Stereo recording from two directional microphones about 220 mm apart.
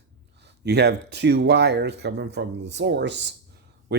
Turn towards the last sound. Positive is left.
turn(degrees=-50)  # may be behind; listen again after turning